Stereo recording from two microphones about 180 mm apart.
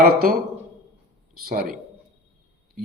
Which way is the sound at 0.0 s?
55° right (ahead or behind).